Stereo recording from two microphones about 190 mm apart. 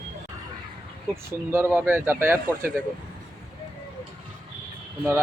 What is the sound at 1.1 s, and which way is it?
Speech, 10° right (ahead or behind).